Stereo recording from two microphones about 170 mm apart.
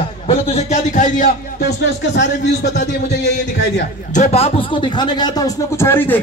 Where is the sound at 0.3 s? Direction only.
40° left (ahead or behind).